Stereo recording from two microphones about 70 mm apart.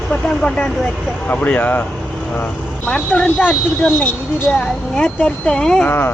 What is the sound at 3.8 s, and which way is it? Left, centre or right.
Speech, left.